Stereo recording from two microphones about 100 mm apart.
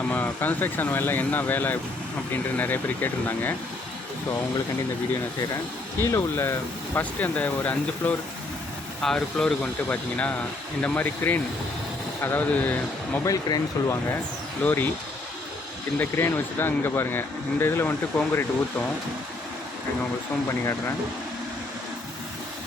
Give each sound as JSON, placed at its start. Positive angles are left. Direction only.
{"t": 0.1, "sound": "speech", "side_deg": 20}
{"t": 6.0, "sound": "speech", "side_deg": 25}
{"t": 13.2, "sound": "speech", "side_deg": 35}
{"t": 14.6, "sound": "speech", "side_deg": 20}
{"t": 16.0, "sound": "speech", "side_deg": 20}
{"t": 20.5, "sound": "speech", "side_deg": 25}